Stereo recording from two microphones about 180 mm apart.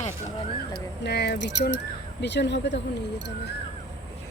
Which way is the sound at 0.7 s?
65° left (ahead or behind).